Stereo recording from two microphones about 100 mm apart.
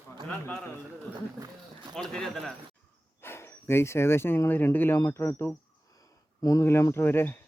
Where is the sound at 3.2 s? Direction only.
25° left (ahead or behind).